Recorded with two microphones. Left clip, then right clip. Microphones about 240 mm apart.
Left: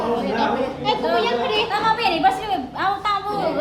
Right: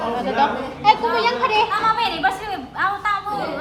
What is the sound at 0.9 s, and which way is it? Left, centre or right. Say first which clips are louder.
Speech: right 4 dB; right.